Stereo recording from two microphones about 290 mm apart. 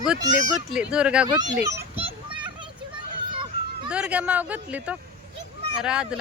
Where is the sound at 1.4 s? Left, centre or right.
Centre.